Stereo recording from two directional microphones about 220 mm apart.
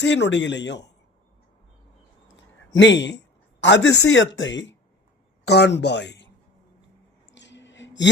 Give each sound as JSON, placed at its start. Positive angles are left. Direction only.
{"t": 0.0, "sound": "speech", "side_deg": 55}
{"t": 2.3, "sound": "a sound", "side_deg": 55}
{"t": 3.6, "sound": "speech", "side_deg": 55}
{"t": 7.3, "sound": "gasp", "side_deg": 55}